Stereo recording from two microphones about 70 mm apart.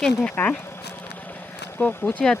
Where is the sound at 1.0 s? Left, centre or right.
Left.